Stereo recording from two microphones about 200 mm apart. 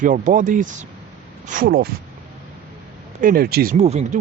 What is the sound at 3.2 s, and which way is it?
Speech, 50° right (ahead or behind).